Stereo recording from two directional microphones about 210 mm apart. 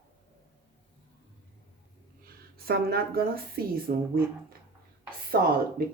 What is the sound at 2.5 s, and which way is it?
Speech, 50° right (ahead or behind).